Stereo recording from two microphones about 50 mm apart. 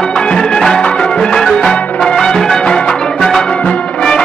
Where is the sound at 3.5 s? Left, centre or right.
Left.